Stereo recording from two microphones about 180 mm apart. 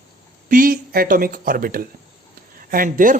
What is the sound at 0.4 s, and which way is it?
Speech, 50° right (ahead or behind).